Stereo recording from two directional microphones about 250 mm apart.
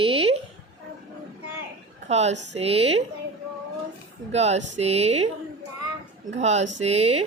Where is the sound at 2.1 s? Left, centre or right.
Right.